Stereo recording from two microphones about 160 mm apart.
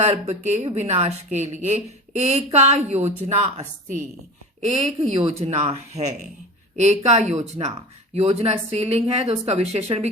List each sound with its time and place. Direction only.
0.0 s speech: 45° right (ahead or behind)
5.0 s speech: 40° right (ahead or behind)